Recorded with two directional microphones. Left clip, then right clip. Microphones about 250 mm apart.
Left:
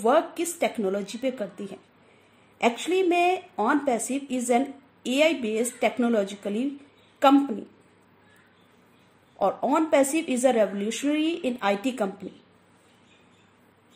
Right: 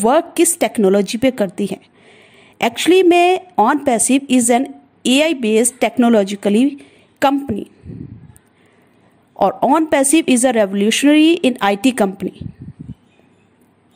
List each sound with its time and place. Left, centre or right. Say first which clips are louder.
0.0 s a woman's voice: right 9 dB; right
9.4 s speech: right 10 dB; right